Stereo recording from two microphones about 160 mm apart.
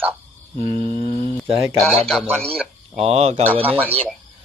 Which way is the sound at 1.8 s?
Centre (ahead or behind).